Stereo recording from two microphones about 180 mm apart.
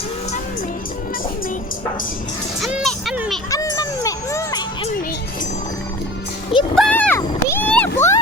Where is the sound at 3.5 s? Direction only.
20° left (ahead or behind).